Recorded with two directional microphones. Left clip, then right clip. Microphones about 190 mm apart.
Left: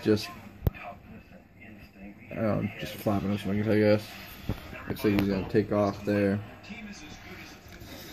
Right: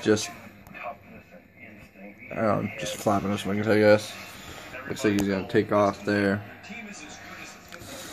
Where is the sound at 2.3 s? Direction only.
5° left (ahead or behind).